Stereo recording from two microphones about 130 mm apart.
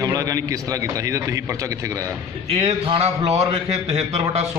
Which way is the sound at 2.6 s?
50° right (ahead or behind).